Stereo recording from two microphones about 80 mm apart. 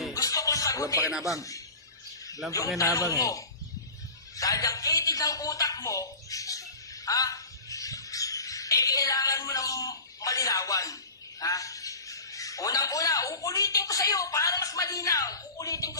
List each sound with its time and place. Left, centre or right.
0.1 s music: left
1.4 s speech: left
2.7 s a man's voice: left